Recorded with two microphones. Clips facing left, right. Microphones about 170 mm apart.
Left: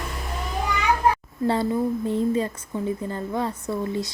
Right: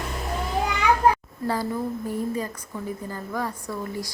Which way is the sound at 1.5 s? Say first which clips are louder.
Left 4 dB; 25° left (ahead or behind).